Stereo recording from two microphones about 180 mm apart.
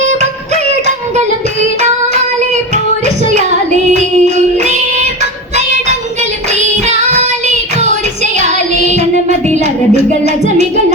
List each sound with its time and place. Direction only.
3.9 s music: 40° right (ahead or behind)
6.5 s child singing: 40° right (ahead or behind)
9.5 s music: 40° right (ahead or behind)